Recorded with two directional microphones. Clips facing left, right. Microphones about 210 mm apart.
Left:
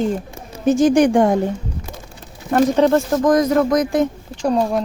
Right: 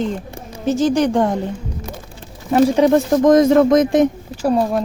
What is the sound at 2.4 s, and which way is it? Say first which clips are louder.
Speech: right 1 dB; 10° right (ahead or behind).